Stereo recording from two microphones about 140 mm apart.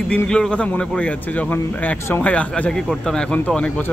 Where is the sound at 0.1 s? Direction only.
5° left (ahead or behind).